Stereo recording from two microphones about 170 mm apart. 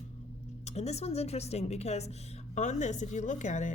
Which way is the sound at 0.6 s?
40° left (ahead or behind).